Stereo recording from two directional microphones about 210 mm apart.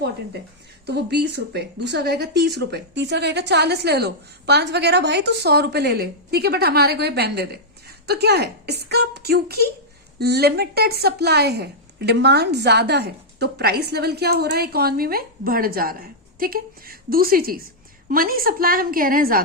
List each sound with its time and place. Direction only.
0.9 s speech: 50° right (ahead or behind)